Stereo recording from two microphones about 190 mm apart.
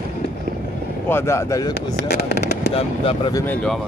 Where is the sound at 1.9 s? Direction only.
60° left (ahead or behind).